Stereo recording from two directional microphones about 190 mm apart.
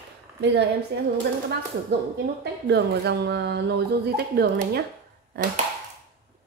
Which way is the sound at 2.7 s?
60° right (ahead or behind).